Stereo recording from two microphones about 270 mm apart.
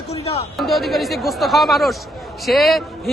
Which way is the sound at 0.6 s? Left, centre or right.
Centre.